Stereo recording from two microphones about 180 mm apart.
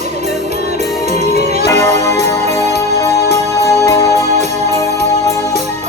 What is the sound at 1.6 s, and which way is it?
Music, 15° left (ahead or behind).